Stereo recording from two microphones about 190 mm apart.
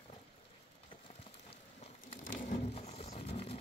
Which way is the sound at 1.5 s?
40° left (ahead or behind).